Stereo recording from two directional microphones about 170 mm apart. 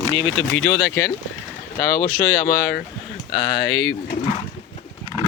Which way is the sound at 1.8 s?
55° left (ahead or behind).